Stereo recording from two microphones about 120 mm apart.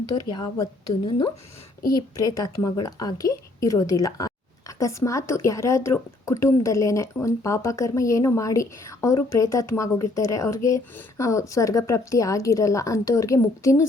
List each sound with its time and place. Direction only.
0.1 s a woman's voice: 35° left (ahead or behind)